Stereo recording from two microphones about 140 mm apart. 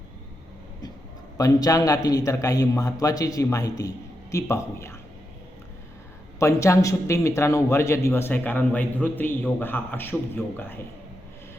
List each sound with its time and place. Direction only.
1.4 s a man's voice: 25° left (ahead or behind)
6.4 s a man's voice: 20° left (ahead or behind)